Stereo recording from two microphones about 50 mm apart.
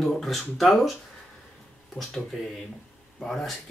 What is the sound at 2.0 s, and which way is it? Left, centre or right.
Speech, left.